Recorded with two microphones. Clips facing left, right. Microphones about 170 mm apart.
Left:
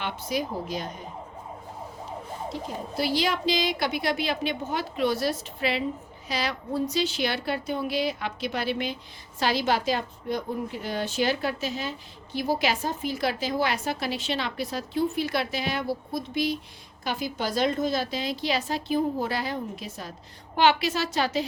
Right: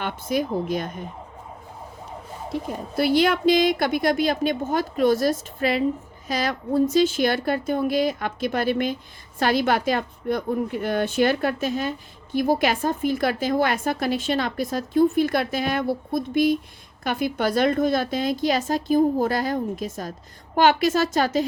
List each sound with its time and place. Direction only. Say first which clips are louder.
0.0 s a woman's voice: right 5 dB; 50° right (ahead or behind)
2.5 s a woman's voice: right 8 dB; 55° right (ahead or behind)